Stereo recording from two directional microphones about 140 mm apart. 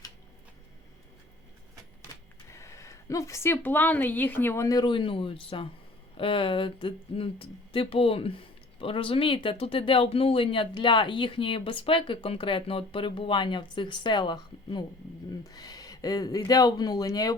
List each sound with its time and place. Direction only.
2.1 s printer: 25° left (ahead or behind)
2.5 s speech: 20° left (ahead or behind)